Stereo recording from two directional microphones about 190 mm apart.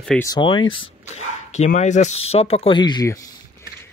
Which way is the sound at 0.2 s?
20° left (ahead or behind).